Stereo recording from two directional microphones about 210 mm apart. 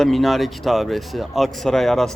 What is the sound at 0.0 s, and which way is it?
Speech, centre (ahead or behind).